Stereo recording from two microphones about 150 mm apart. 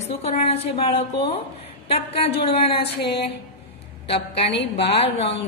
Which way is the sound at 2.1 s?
40° left (ahead or behind).